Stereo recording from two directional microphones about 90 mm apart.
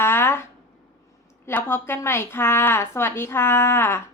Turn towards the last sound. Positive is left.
turn(degrees=30)  # may be behind; listen again after turning